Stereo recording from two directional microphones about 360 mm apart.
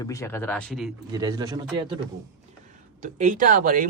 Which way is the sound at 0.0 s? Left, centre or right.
Centre.